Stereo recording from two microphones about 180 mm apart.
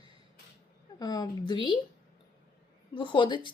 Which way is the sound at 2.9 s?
25° left (ahead or behind).